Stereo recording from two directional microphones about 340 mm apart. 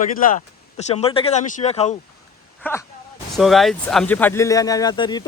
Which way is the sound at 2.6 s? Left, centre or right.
Centre.